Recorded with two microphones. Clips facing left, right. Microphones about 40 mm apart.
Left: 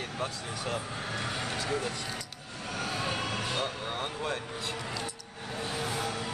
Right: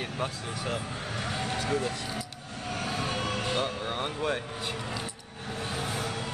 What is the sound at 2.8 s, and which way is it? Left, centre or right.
Vehicle, centre.